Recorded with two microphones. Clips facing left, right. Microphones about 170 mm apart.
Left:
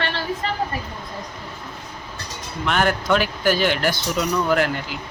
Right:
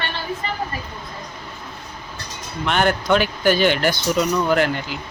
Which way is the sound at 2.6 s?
Centre (ahead or behind).